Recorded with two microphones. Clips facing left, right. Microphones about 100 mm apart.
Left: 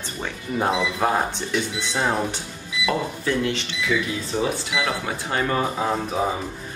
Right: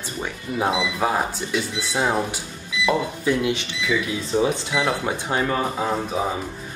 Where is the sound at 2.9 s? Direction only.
15° right (ahead or behind).